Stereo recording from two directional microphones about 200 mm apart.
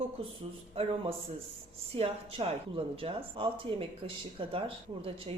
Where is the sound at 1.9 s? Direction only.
30° right (ahead or behind).